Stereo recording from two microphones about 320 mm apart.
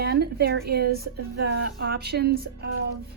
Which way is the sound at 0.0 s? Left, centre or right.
Right.